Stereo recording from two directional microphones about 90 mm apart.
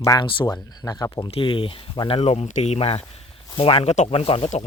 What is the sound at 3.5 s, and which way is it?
Speech, 70° left (ahead or behind).